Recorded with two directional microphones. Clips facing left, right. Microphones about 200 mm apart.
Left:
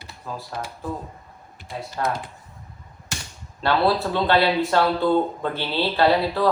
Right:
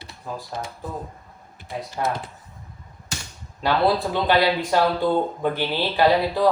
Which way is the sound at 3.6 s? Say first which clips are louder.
Even; 15° right (ahead or behind).